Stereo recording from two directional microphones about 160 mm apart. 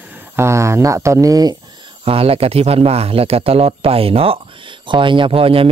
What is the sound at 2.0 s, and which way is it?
Speech, 35° right (ahead or behind).